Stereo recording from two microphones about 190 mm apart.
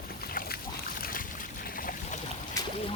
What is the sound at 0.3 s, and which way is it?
Boat, 55° left (ahead or behind).